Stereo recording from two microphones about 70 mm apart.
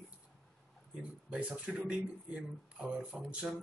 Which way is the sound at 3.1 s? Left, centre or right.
Centre.